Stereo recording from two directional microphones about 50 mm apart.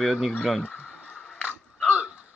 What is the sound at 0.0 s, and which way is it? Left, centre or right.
Speech, centre.